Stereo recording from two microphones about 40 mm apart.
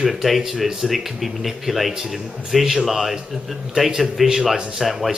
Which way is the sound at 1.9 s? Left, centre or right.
Centre.